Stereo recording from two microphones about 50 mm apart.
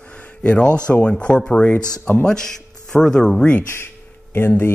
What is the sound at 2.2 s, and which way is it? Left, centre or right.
Speech, centre.